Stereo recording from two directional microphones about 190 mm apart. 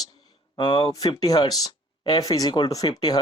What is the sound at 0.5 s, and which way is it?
Speech, 25° left (ahead or behind).